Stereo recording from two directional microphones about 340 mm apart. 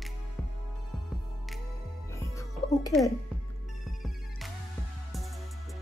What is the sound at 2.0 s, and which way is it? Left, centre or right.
Music, centre.